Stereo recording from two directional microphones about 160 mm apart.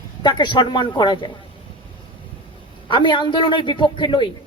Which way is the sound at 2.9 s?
30° left (ahead or behind).